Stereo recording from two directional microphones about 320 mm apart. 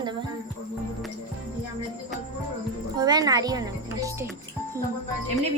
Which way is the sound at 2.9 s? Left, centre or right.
Centre.